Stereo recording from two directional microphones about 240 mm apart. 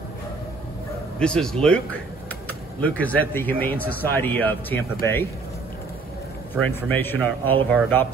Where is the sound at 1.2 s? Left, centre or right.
Centre.